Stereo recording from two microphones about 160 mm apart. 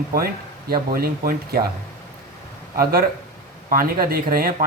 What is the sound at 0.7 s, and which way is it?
Speech, 70° right (ahead or behind).